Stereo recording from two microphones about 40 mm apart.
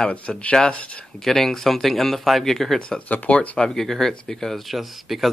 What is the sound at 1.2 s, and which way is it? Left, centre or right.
Speech, centre.